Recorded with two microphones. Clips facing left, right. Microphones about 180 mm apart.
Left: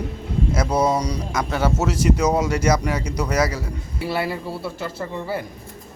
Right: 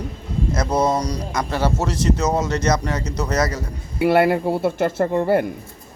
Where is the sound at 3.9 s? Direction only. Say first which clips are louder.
Right 9 dB; 60° right (ahead or behind).